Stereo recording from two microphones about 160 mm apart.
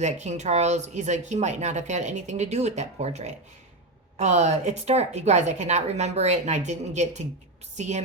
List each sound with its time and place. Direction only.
0.0 s speech: 45° right (ahead or behind)